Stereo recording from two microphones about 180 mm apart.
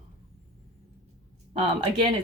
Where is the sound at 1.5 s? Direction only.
30° right (ahead or behind).